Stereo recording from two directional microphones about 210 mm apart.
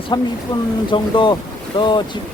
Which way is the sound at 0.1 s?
20° left (ahead or behind).